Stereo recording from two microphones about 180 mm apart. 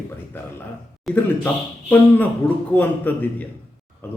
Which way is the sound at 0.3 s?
10° left (ahead or behind).